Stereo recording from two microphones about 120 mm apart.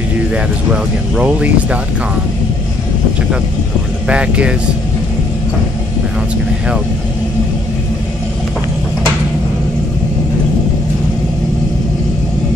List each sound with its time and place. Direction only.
1.1 s speech: 10° right (ahead or behind)
4.1 s speech: 10° right (ahead or behind)